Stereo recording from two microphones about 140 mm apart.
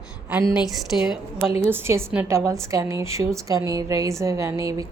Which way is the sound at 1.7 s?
15° right (ahead or behind).